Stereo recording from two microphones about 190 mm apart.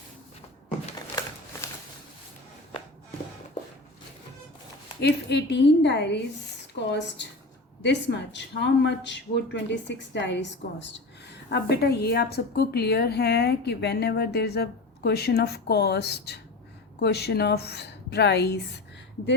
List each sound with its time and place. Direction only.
4.9 s speech: 60° left (ahead or behind)